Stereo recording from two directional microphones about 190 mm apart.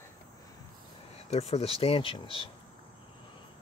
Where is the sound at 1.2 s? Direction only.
35° left (ahead or behind).